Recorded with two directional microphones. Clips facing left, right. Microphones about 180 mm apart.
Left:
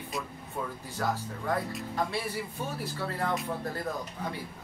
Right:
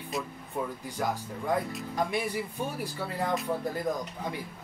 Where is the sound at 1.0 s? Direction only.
15° right (ahead or behind).